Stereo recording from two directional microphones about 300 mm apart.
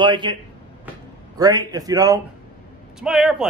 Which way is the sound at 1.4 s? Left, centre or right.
Centre.